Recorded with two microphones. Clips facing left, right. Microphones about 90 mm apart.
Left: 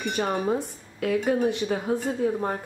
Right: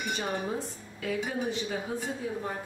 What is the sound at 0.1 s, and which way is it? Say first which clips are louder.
Speech: left 8 dB; 65° left (ahead or behind).